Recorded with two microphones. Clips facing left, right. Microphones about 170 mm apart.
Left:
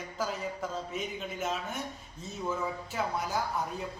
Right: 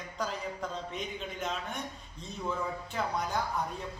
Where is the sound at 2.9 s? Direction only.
5° left (ahead or behind).